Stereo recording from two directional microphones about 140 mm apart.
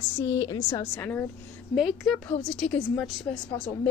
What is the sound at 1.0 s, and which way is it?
Speech, 15° left (ahead or behind).